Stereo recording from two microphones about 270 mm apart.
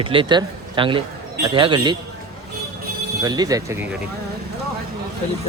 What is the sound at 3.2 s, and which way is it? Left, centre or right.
Speech, centre.